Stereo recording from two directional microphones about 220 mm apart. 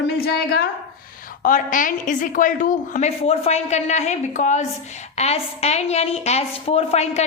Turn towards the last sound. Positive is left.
turn(degrees=30)  # may be behind; listen again after turning